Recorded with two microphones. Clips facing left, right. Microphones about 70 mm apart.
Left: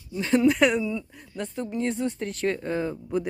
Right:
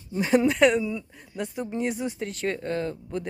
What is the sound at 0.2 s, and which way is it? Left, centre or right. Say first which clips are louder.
Speech: right 2 dB; centre.